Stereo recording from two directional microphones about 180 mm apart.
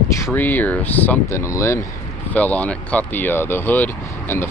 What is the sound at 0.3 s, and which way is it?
Speech, 10° left (ahead or behind).